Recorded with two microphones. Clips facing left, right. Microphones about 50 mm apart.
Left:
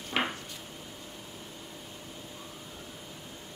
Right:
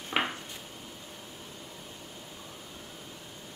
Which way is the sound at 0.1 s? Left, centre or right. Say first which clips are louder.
Right 1 dB; centre.